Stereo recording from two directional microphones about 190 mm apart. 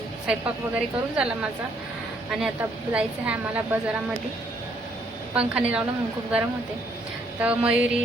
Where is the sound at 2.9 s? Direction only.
5° right (ahead or behind).